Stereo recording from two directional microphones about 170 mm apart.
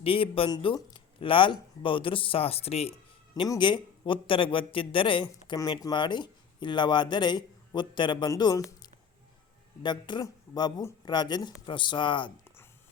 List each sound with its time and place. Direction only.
0.0 s speech: 35° left (ahead or behind)
3.3 s a man's voice: 25° left (ahead or behind)
9.8 s a man's voice: 25° left (ahead or behind)